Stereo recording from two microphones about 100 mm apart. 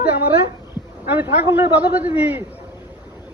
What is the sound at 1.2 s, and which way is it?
A woman's voice, 20° right (ahead or behind).